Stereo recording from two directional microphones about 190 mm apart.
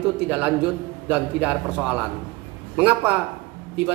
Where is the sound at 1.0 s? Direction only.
5° right (ahead or behind).